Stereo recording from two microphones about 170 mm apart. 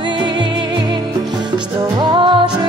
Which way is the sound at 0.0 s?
25° right (ahead or behind).